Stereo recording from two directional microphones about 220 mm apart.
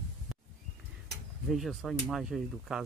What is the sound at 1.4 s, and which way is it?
Speech, centre (ahead or behind).